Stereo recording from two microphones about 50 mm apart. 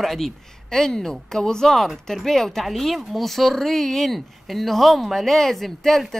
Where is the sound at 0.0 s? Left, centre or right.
Centre.